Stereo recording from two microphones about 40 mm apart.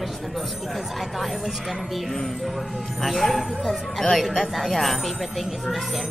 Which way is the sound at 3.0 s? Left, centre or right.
Centre.